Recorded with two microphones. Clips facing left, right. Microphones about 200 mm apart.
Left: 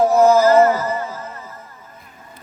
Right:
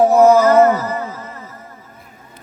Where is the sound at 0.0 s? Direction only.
65° right (ahead or behind).